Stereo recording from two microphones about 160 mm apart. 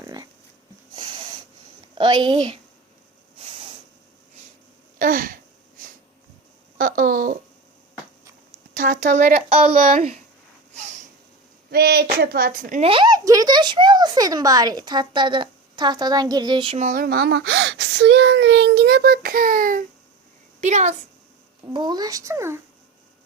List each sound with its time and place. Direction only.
0.0 s a sound: 25° right (ahead or behind)
2.0 s speech: 30° right (ahead or behind)
4.9 s a sound: 60° right (ahead or behind)
6.7 s a sound: 60° right (ahead or behind)
8.7 s speech: 55° right (ahead or behind); by 9.7 s 40° right (ahead or behind)
10.8 s snort: 50° right (ahead or behind)
11.7 s speech: 80° right; by 12.8 s 60° right (ahead or behind)
12.8 s speech: 30° right (ahead or behind)
16.7 s speech: 55° right (ahead or behind)
20.6 s a woman's voice: 45° right (ahead or behind)
21.7 s speech: 25° right (ahead or behind)